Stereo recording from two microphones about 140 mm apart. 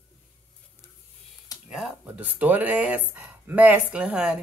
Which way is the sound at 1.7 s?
10° right (ahead or behind).